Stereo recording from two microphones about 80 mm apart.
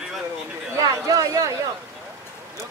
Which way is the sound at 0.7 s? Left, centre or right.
Right.